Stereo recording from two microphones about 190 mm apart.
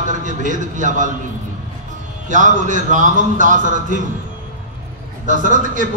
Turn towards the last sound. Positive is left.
turn(degrees=-45)  # may be behind; listen again after turning